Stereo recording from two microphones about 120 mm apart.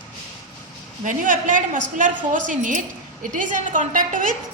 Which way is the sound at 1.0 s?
90° right.